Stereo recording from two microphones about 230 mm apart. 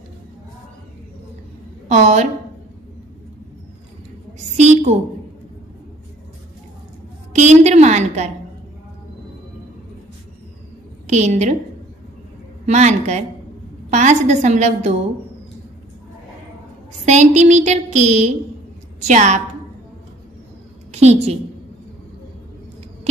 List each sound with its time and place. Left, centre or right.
1.9 s a woman's voice: right
4.6 s a sound: right
7.3 s a sound: right
11.1 s a woman's voice: right
12.6 s a woman's voice: right
17.0 s a woman's voice: right
20.9 s a woman's voice: right